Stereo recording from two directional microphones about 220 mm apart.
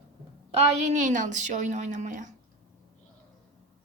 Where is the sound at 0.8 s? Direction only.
35° right (ahead or behind).